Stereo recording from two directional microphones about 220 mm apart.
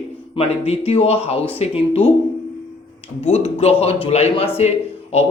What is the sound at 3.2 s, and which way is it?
Speech, 30° left (ahead or behind).